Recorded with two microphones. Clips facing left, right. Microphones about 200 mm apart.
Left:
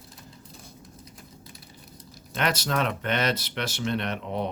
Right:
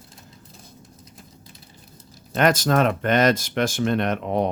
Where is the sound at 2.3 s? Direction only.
50° right (ahead or behind).